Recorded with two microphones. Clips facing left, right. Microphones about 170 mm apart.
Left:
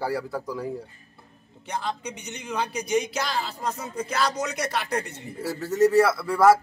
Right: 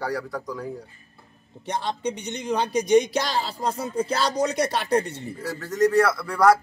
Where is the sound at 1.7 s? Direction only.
35° right (ahead or behind).